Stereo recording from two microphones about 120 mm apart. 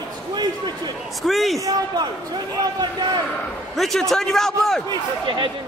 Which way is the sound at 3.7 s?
Centre (ahead or behind).